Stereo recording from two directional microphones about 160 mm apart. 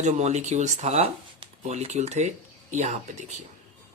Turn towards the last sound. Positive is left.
turn(degrees=-50)  # may be behind; listen again after turning